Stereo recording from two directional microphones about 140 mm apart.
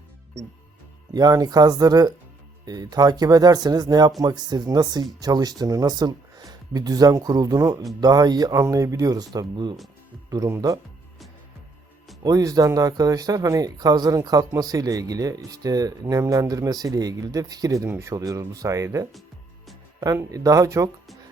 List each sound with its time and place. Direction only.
1.1 s speech: 25° right (ahead or behind)
12.2 s speech: 25° right (ahead or behind)